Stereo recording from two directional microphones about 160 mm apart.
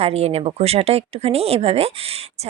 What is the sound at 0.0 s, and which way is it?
Speech, 40° right (ahead or behind).